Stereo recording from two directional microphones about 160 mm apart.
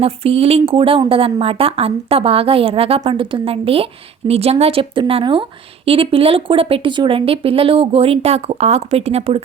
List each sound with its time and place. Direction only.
0.0 s a woman's voice: 35° right (ahead or behind)